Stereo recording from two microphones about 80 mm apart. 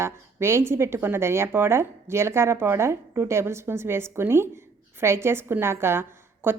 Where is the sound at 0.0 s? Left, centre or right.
Right.